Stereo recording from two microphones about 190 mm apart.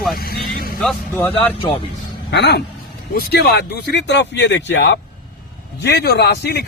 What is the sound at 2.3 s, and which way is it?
Speech, 65° left (ahead or behind).